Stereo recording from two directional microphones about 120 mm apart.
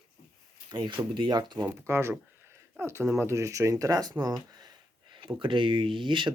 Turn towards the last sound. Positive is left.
turn(degrees=-40)  # may be behind; listen again after turning